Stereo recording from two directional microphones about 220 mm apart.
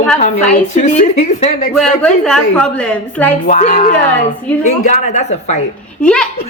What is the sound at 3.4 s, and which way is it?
A woman's voice, 35° left (ahead or behind).